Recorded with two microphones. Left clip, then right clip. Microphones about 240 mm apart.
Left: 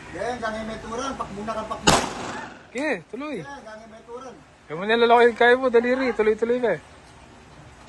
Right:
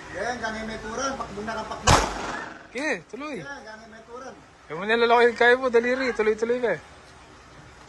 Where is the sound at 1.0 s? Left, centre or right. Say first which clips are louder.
Right 1 dB; left.